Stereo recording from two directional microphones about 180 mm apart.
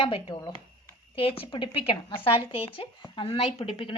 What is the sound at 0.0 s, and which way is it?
Speech, 30° left (ahead or behind).